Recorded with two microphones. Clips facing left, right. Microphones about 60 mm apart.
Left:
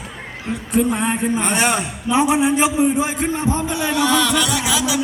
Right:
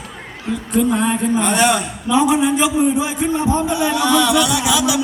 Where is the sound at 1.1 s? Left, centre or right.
Left.